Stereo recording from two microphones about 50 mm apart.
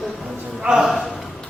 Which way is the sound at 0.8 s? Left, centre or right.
Centre.